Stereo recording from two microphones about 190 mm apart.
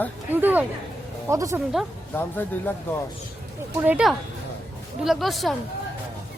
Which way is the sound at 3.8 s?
5° right (ahead or behind).